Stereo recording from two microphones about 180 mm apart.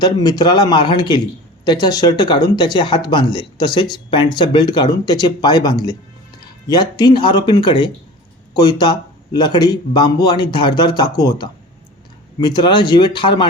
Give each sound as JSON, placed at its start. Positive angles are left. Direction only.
{"t": 0.0, "sound": "a man's voice", "side_deg": 20}